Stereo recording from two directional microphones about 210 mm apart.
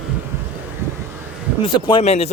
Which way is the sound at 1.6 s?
25° left (ahead or behind).